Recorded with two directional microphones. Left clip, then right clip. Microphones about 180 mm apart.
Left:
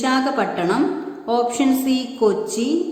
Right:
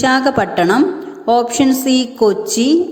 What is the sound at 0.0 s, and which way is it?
A woman's voice, 35° right (ahead or behind).